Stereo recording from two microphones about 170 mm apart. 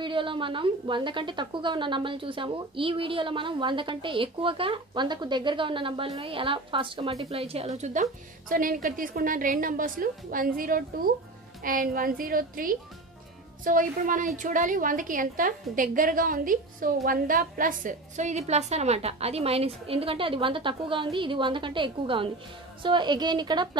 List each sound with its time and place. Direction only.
0.0 s a woman's voice: 30° right (ahead or behind)